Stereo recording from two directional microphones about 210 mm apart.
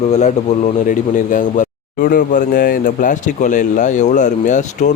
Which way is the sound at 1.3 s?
40° left (ahead or behind).